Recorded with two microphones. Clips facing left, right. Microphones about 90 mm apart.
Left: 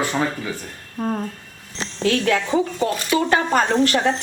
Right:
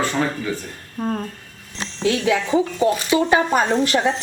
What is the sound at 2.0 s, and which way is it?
Speech, 10° right (ahead or behind).